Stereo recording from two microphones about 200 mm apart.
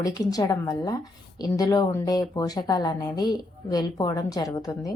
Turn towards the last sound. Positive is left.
turn(degrees=15)  # may be behind; listen again after turning